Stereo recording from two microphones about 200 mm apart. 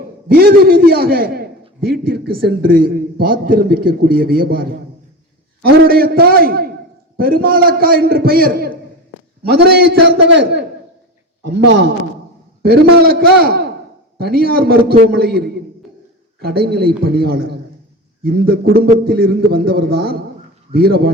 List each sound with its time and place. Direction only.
0.3 s a man's voice: 50° right (ahead or behind)